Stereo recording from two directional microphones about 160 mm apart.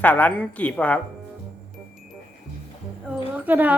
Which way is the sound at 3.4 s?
10° right (ahead or behind).